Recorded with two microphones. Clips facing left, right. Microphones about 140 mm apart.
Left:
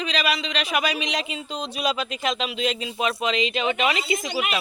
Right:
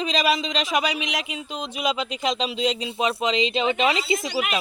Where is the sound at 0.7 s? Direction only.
10° right (ahead or behind).